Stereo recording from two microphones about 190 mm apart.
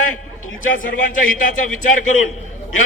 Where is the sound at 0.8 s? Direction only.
45° left (ahead or behind).